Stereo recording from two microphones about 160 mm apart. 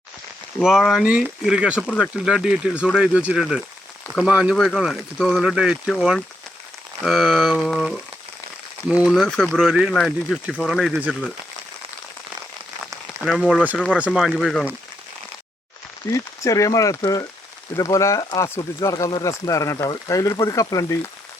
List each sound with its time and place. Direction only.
0.6 s speech: centre (ahead or behind)
9.0 s speech: centre (ahead or behind)
13.2 s speech: centre (ahead or behind)
16.1 s speech: 20° left (ahead or behind)